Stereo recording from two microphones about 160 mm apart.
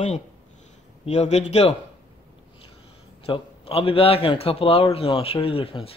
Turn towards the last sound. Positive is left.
turn(degrees=35)  # may be behind; listen again after turning